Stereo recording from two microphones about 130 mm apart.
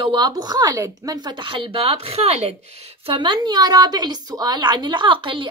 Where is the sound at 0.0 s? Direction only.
35° right (ahead or behind).